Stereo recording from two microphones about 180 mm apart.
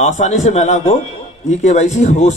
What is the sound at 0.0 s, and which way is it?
Speech, 40° left (ahead or behind).